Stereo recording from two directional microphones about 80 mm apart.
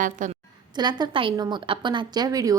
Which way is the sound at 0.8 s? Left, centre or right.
Right.